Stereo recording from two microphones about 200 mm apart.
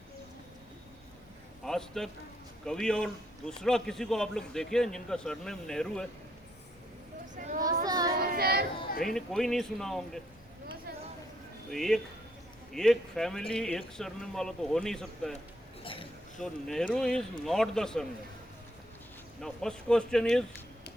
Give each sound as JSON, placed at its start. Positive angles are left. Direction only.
{"t": 1.6, "sound": "a man's voice", "side_deg": 0}
{"t": 7.3, "sound": "a sound", "side_deg": -45}
{"t": 7.9, "sound": "child singing", "side_deg": -20}
{"t": 8.1, "sound": "child singing", "side_deg": -50}
{"t": 9.0, "sound": "a man's voice", "side_deg": 0}
{"t": 11.7, "sound": "a man's voice", "side_deg": 0}
{"t": 15.8, "sound": "a sound", "side_deg": 25}
{"t": 16.4, "sound": "a man's voice", "side_deg": 5}
{"t": 19.4, "sound": "a man's voice", "side_deg": 5}